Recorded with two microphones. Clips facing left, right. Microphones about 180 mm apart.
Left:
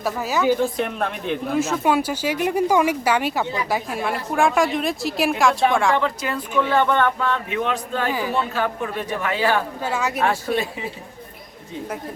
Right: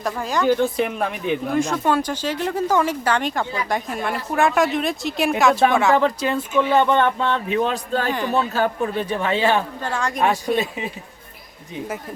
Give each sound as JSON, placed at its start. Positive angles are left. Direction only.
{"t": 0.0, "sound": "a woman's voice", "side_deg": 5}
{"t": 6.0, "sound": "speech", "side_deg": -25}
{"t": 9.8, "sound": "speech", "side_deg": 5}
{"t": 10.2, "sound": "speech", "side_deg": -15}